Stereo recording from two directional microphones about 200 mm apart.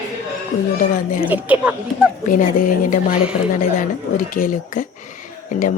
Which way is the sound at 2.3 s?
40° left (ahead or behind).